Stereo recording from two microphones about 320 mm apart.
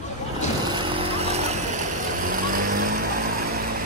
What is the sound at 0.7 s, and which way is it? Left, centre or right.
Vehicle, centre.